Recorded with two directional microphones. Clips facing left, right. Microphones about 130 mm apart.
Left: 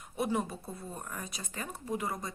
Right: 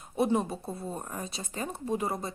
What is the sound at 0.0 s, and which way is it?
A woman's voice, 30° right (ahead or behind).